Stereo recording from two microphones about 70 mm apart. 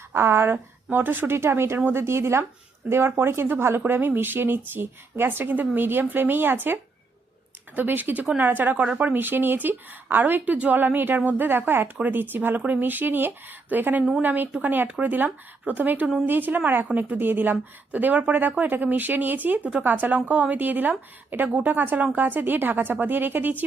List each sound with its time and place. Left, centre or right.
0.1 s speech: right
1.4 s speech: right
7.8 s a woman's voice: right